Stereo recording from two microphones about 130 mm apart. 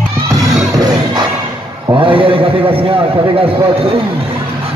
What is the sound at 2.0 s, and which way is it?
Speech, 45° right (ahead or behind).